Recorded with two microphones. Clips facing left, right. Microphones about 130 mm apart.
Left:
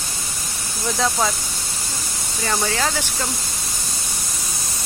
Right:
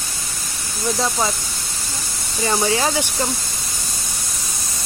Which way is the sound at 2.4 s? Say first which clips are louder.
Right 3 dB; 20° right (ahead or behind).